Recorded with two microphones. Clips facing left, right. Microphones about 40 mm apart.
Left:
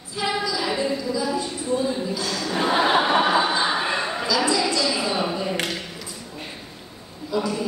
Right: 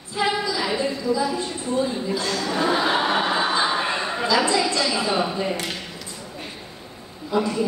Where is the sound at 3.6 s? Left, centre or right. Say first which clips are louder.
Even; centre.